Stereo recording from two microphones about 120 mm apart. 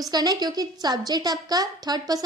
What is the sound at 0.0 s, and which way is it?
A woman's voice, 35° right (ahead or behind).